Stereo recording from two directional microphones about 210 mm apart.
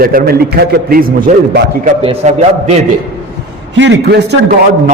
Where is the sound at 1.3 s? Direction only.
35° right (ahead or behind).